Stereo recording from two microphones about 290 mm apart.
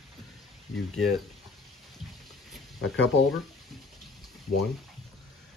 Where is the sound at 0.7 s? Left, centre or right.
Centre.